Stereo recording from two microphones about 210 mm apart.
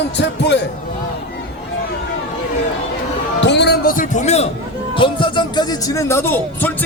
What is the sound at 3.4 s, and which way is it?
A man's voice, 55° left (ahead or behind).